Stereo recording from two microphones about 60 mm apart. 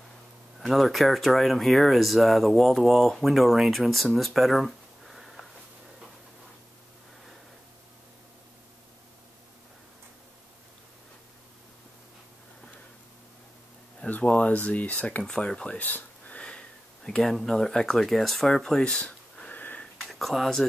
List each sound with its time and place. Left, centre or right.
0.6 s speech: centre
14.2 s speech: left
15.2 s speech: centre
15.8 s a sound: left
17.2 s speech: centre
18.9 s wheeze: left
20.0 s speech: centre